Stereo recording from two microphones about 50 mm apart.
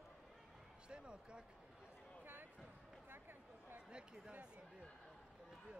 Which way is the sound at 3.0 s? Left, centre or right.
Right.